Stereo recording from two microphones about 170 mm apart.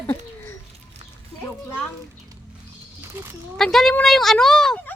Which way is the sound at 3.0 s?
15° right (ahead or behind).